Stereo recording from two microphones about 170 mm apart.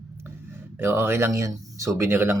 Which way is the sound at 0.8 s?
15° right (ahead or behind).